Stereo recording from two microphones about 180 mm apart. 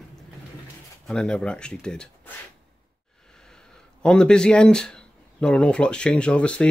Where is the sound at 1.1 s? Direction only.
5° left (ahead or behind).